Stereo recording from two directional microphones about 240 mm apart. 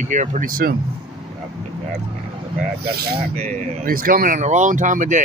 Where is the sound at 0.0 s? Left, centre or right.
Right.